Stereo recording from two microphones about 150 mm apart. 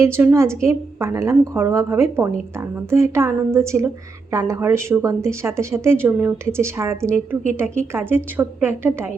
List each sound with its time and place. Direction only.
0.0 s a woman's voice: 15° right (ahead or behind)